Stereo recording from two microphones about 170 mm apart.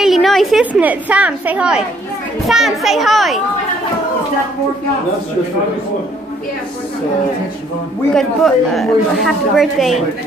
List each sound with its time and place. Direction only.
0.0 s a woman's voice: centre (ahead or behind)
8.1 s speech: centre (ahead or behind)